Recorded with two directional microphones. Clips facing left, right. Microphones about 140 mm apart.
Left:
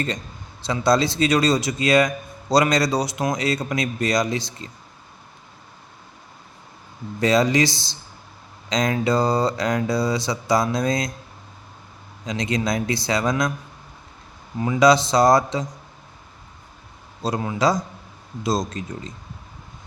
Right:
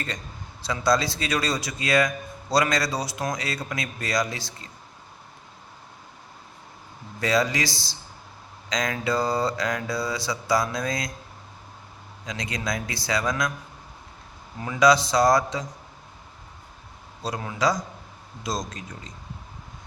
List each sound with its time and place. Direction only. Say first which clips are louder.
0.7 s speech: left 4 dB; 25° left (ahead or behind)
7.2 s speech: left 6 dB; 25° left (ahead or behind)
12.2 s speech: left 7 dB; 25° left (ahead or behind)
14.6 s speech: left 3 dB; 20° left (ahead or behind)
17.2 s speech: left 4 dB; 25° left (ahead or behind)